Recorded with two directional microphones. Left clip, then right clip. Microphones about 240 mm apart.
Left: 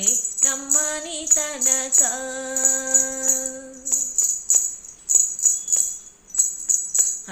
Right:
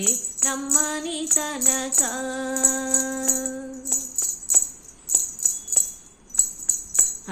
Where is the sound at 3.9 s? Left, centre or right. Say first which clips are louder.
Left 5 dB; right.